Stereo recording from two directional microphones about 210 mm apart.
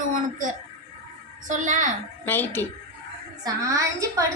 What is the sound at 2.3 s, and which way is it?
Speech, 10° left (ahead or behind).